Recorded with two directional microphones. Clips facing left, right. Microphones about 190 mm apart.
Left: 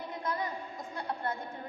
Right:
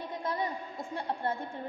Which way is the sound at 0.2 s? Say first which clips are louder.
Right 1 dB; 30° right (ahead or behind).